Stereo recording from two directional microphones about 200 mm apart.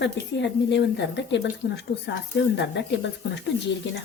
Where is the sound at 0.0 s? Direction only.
60° left (ahead or behind).